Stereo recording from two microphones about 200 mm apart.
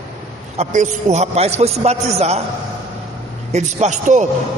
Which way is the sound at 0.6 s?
35° right (ahead or behind).